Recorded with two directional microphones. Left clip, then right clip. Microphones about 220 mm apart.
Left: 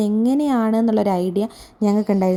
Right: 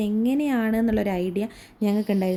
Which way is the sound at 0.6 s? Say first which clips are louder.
Left 5 dB; 15° left (ahead or behind).